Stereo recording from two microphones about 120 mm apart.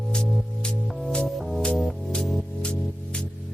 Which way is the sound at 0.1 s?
10° left (ahead or behind).